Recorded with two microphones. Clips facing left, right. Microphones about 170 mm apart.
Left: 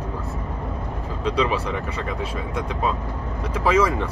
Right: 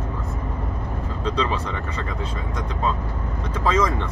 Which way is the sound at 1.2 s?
10° left (ahead or behind).